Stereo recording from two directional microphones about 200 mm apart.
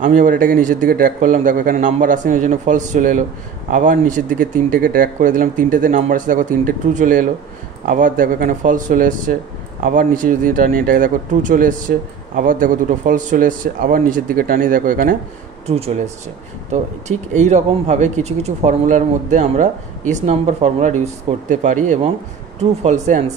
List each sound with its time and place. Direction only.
0.0 s speech: 40° right (ahead or behind)
15.6 s speech: 30° right (ahead or behind)
17.3 s speech: 35° right (ahead or behind)